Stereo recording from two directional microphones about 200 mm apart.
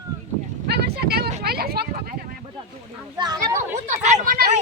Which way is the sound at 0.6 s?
55° right (ahead or behind).